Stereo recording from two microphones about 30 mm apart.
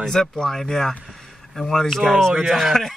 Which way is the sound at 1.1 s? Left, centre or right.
Centre.